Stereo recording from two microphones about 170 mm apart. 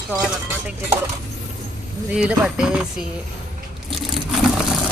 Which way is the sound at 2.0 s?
5° right (ahead or behind).